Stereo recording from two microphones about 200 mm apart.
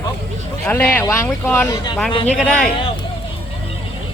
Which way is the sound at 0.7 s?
10° left (ahead or behind).